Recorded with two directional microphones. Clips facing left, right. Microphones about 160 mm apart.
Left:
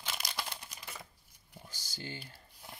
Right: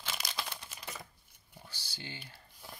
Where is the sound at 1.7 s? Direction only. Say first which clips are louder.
Left 3 dB; 45° left (ahead or behind).